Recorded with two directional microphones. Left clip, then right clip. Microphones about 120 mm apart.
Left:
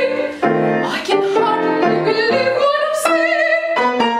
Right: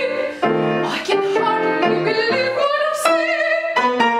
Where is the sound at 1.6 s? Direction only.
30° right (ahead or behind).